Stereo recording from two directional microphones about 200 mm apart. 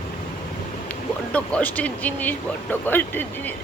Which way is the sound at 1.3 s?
5° left (ahead or behind).